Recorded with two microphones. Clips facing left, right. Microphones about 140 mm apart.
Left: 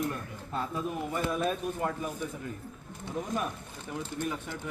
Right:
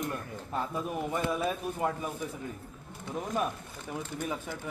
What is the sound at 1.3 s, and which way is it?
Speech, 5° right (ahead or behind).